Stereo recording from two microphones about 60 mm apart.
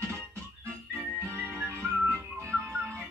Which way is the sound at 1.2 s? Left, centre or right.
Right.